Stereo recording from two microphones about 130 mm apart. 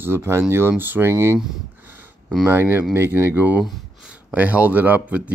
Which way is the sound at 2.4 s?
15° right (ahead or behind).